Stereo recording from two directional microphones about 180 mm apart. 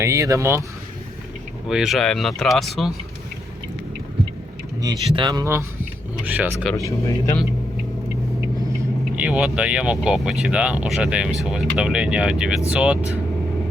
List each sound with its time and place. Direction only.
0.0 s speech: 15° right (ahead or behind)
1.6 s speech: centre (ahead or behind)
4.8 s speech: 25° right (ahead or behind); by 6.7 s 5° right (ahead or behind)
6.7 s speech: 15° left (ahead or behind)
9.1 s speech: 5° right (ahead or behind)